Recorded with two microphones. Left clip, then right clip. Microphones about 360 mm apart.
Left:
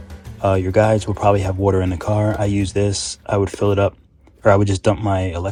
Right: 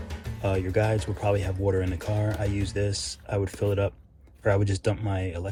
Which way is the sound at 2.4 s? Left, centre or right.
Centre.